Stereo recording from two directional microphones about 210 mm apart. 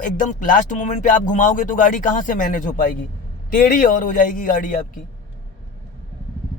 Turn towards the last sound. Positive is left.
turn(degrees=40)  # may be behind; listen again after turning